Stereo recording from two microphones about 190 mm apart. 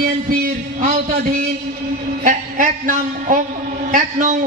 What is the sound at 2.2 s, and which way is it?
A man's voice, 40° right (ahead or behind).